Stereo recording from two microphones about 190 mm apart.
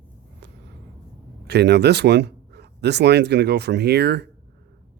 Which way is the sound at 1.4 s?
60° right (ahead or behind).